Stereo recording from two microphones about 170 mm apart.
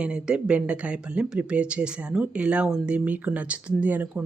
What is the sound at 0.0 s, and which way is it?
Speech, 5° right (ahead or behind).